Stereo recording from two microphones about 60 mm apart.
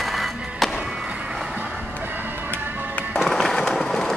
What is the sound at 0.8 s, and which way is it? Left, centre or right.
Skateboard, centre.